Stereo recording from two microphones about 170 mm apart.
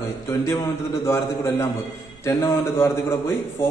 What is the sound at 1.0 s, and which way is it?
A man's voice, 15° left (ahead or behind).